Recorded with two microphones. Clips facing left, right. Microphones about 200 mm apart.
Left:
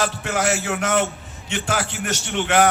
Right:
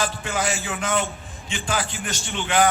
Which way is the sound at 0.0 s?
70° left (ahead or behind).